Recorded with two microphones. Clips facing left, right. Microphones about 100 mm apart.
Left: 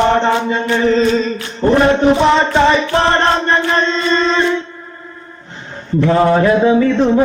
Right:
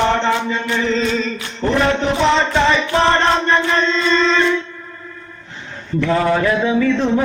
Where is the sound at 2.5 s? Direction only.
25° left (ahead or behind).